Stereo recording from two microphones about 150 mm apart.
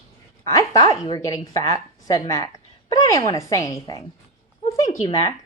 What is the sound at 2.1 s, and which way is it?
A woman's voice, 25° left (ahead or behind).